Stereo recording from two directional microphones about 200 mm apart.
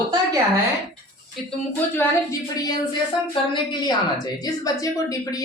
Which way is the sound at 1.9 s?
15° left (ahead or behind).